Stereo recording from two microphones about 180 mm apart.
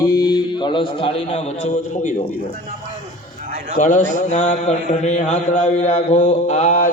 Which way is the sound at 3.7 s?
45° left (ahead or behind).